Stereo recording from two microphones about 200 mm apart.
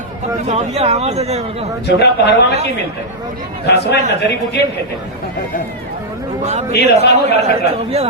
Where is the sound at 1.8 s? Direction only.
55° left (ahead or behind).